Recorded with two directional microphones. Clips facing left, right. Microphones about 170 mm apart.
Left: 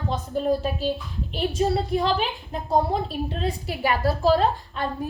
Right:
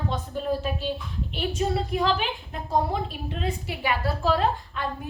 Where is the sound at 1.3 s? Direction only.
35° left (ahead or behind).